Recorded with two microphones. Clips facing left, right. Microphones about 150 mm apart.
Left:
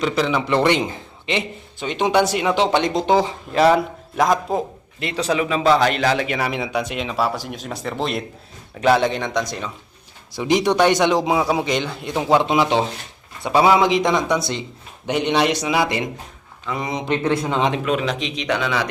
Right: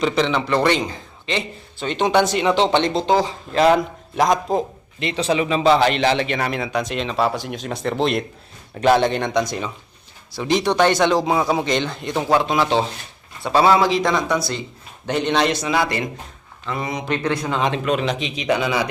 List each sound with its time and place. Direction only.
0.0 s speech: 5° left (ahead or behind)
0.4 s a man's voice: 20° left (ahead or behind)
1.9 s a man's voice: 5° left (ahead or behind)
10.3 s a man's voice: 15° left (ahead or behind)
17.8 s speech: centre (ahead or behind)